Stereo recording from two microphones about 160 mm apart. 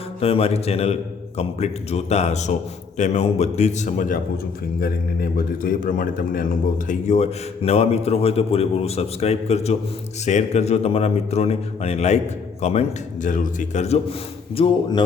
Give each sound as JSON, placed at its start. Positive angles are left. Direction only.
{"t": 0.2, "sound": "a man's voice", "side_deg": 40}
{"t": 13.2, "sound": "a man's voice", "side_deg": 55}